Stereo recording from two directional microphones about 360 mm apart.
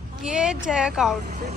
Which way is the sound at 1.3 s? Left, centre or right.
Centre.